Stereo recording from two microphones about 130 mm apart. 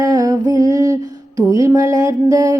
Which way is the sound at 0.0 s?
30° right (ahead or behind).